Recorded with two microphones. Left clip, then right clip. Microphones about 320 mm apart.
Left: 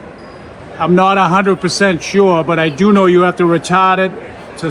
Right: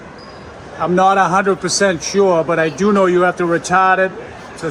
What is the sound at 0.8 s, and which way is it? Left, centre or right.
A man's voice, left.